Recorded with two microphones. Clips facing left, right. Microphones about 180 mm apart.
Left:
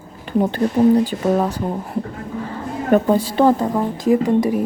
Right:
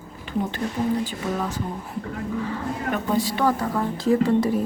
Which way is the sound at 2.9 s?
40° left (ahead or behind).